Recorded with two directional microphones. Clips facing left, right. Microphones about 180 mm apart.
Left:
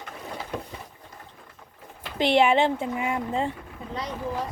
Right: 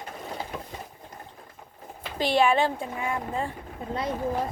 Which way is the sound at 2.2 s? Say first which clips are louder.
Left 2 dB; 20° left (ahead or behind).